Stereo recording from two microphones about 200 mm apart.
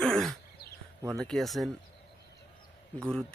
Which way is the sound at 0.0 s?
Centre (ahead or behind).